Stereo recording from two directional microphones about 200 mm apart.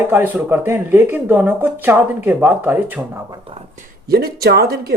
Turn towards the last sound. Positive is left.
turn(degrees=-50)  # may be behind; listen again after turning